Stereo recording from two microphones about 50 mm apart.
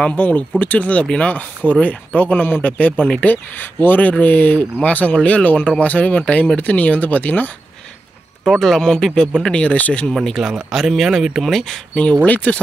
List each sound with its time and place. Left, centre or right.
0.0 s speech: left
3.3 s speech: left
8.5 s speech: centre; by 10.1 s left
10.3 s speech: centre
12.3 s speech: left